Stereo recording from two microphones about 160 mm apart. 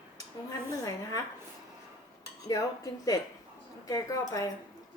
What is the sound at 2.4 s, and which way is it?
A woman's voice, 20° left (ahead or behind).